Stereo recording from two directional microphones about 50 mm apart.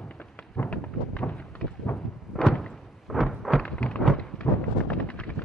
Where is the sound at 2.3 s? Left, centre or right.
Centre.